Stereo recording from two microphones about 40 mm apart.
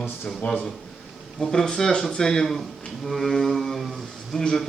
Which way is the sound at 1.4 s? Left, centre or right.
Centre.